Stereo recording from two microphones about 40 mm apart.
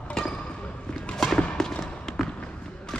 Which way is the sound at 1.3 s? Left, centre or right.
Centre.